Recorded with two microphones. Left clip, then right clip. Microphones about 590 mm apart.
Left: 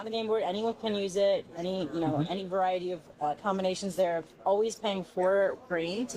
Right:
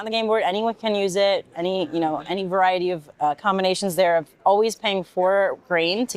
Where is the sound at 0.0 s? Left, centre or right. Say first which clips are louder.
Right 9 dB; right.